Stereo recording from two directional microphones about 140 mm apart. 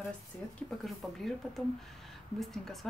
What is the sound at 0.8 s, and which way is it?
A woman's voice, centre (ahead or behind).